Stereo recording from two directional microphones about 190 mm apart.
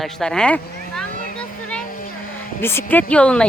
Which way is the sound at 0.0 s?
5° left (ahead or behind).